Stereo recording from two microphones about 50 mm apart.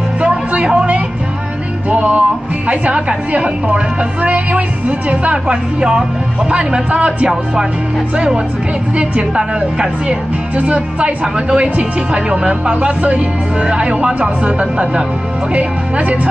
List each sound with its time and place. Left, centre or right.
0.2 s music: right
1.9 s music: right
2.7 s a woman's voice: right
8.9 s a woman's voice: right
15.5 s a woman's voice: right